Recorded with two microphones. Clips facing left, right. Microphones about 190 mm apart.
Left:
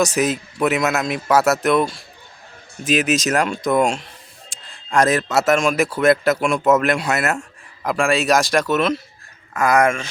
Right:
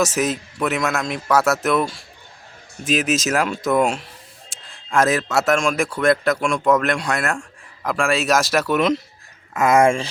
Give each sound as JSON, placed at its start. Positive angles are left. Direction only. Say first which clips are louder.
{"t": 0.0, "sound": "speech", "louder": "left 2 dB", "side_deg": 0}